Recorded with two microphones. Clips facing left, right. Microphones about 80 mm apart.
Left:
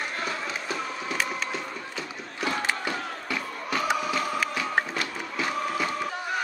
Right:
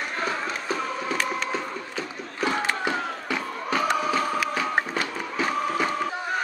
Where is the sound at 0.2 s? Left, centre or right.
Right.